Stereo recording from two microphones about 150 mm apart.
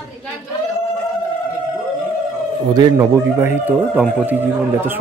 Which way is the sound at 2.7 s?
20° right (ahead or behind).